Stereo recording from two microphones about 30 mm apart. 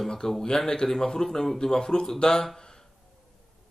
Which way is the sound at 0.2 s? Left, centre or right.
Centre.